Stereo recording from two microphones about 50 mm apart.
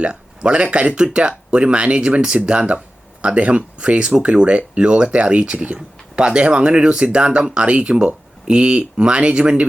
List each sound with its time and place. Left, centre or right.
0.0 s speech: centre